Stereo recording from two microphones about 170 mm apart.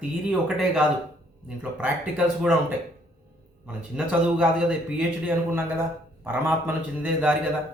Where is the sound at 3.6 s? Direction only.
5° right (ahead or behind).